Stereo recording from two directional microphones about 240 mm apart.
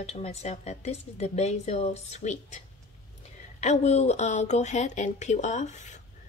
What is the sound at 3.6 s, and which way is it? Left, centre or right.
A woman's voice, left.